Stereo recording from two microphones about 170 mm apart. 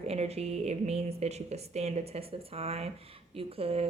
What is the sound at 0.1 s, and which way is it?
A woman's voice, 35° right (ahead or behind).